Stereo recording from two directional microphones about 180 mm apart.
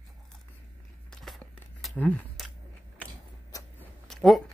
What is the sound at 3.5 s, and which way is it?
Biting, 20° left (ahead or behind).